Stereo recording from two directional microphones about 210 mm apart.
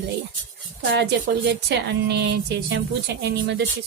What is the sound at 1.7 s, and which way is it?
Speech, 55° right (ahead or behind).